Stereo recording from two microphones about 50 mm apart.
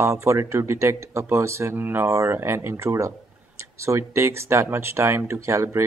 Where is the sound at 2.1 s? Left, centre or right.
Right.